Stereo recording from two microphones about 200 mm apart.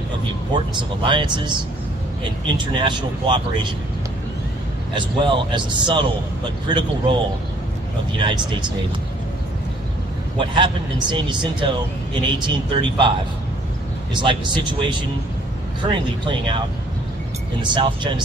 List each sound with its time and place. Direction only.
0.7 s a man's voice: 25° right (ahead or behind)
4.9 s a man's voice: 25° right (ahead or behind)
8.2 s a man's voice: 25° right (ahead or behind)
10.3 s a man's voice: 25° right (ahead or behind)
14.1 s a man's voice: 25° right (ahead or behind)